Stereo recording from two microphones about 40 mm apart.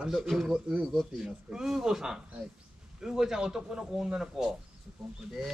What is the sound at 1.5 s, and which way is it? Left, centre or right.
Speech, centre.